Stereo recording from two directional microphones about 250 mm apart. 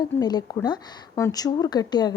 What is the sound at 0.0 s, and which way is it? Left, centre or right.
A woman's voice, centre.